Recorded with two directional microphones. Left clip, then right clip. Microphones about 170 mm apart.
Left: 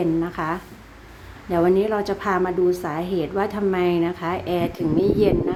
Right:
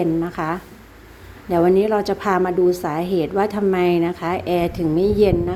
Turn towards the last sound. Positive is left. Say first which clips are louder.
# right 2 dB
turn(degrees=-25)  # may be behind; listen again after turning